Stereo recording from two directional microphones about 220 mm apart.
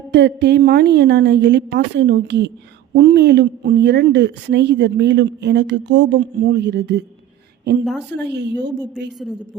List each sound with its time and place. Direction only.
0.1 s a woman's voice: 50° right (ahead or behind)